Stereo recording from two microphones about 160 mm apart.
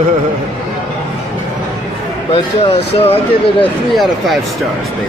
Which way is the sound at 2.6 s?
35° left (ahead or behind).